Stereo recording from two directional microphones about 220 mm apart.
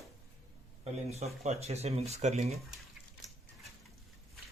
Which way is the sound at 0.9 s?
30° right (ahead or behind).